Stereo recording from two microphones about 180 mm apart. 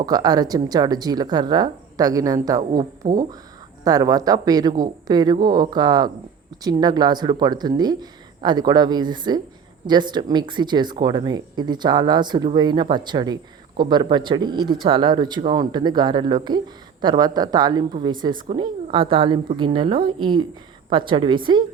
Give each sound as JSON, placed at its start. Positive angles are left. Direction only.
{"t": 0.0, "sound": "speech", "side_deg": -20}